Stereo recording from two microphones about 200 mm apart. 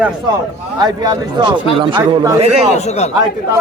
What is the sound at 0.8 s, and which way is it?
Speech, 20° right (ahead or behind).